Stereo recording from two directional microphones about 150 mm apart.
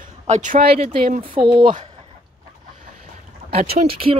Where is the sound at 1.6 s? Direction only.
60° right (ahead or behind).